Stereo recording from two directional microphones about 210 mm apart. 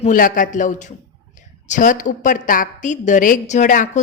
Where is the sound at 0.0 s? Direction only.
40° left (ahead or behind).